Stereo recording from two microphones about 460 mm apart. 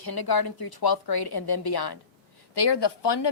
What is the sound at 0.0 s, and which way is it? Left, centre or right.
A woman's voice, left.